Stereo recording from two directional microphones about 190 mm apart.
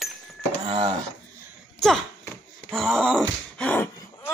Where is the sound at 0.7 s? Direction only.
30° right (ahead or behind).